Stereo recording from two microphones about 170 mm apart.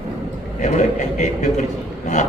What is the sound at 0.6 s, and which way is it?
A man's voice, 45° left (ahead or behind).